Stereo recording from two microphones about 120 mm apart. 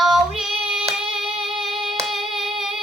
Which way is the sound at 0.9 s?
5° right (ahead or behind).